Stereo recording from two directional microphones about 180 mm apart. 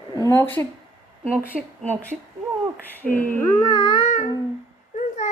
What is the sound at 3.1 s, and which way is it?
Speech, 10° left (ahead or behind).